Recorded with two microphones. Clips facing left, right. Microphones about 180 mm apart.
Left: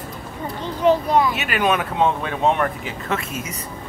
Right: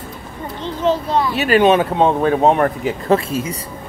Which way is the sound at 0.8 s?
15° left (ahead or behind).